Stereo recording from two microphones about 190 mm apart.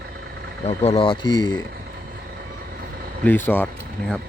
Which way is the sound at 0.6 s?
30° left (ahead or behind).